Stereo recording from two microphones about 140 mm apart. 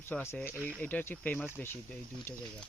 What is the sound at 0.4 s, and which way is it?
Speech, 10° left (ahead or behind).